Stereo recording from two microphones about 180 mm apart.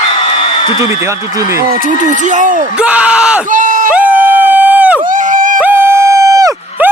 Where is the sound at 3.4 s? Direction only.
45° right (ahead or behind).